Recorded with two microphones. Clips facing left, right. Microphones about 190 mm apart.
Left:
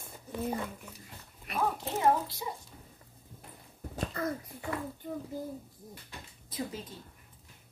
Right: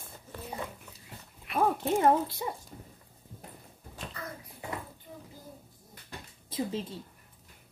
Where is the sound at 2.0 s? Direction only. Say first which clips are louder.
Right 2 dB; 55° right (ahead or behind).